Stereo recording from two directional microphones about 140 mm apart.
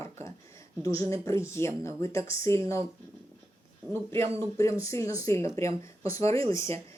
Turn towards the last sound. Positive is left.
turn(degrees=20)  # may be behind; listen again after turning